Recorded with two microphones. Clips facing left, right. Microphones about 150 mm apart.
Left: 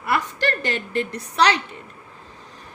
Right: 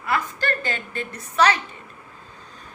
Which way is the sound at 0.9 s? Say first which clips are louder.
Left 7 dB; 75° left (ahead or behind).